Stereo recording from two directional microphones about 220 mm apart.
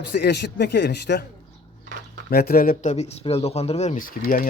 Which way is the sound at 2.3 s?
45° left (ahead or behind).